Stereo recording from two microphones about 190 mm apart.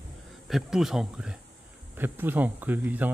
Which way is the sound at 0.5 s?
Centre (ahead or behind).